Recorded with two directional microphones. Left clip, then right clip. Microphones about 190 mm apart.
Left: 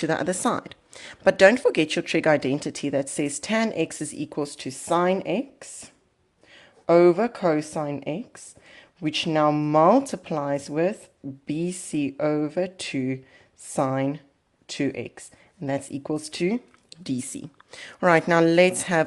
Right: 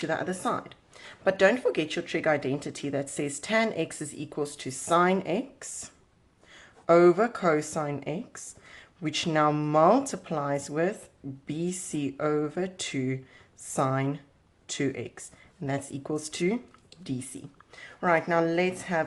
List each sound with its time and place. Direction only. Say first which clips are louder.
0.1 s a woman's voice: left 3 dB; 50° left (ahead or behind); by 16.6 s 25° left (ahead or behind)
16.9 s speech: left 6 dB; 40° left (ahead or behind); by 19.0 s 60° left (ahead or behind)